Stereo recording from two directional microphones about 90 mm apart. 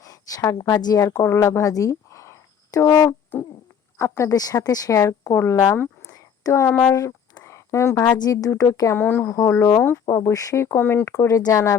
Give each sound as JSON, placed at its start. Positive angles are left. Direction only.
{"t": 0.0, "sound": "a sound", "side_deg": 40}
{"t": 0.8, "sound": "speech", "side_deg": 45}
{"t": 4.2, "sound": "speech", "side_deg": 40}
{"t": 6.1, "sound": "a sound", "side_deg": 35}
{"t": 8.1, "sound": "speech", "side_deg": 45}
{"t": 9.0, "sound": "speech", "side_deg": 25}
{"t": 11.1, "sound": "speech", "side_deg": 40}